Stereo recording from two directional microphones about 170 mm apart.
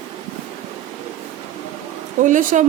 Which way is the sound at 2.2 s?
50° right (ahead or behind).